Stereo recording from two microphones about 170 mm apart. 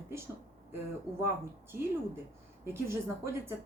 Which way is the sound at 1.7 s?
15° right (ahead or behind).